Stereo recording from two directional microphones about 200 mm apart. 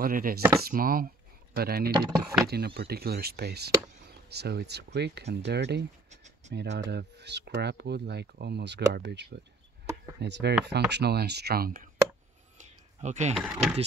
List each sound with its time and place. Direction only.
0.0 s speech: 45° right (ahead or behind)
1.9 s speech: 20° right (ahead or behind)
2.4 s speech: 55° right (ahead or behind)
6.0 s a sound: 35° right (ahead or behind)
6.5 s speech: 55° right (ahead or behind)
12.5 s a sound: 35° right (ahead or behind)
13.4 s speech: 10° right (ahead or behind)